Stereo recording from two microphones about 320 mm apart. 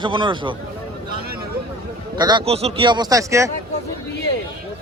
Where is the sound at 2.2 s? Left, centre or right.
Centre.